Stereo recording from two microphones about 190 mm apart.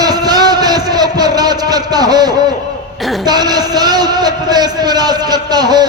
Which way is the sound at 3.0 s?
Centre (ahead or behind).